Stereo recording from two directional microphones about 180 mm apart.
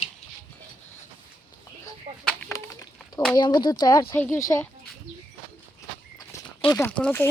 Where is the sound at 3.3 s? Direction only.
25° left (ahead or behind).